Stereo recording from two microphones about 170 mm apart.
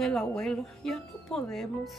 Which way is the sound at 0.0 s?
Centre (ahead or behind).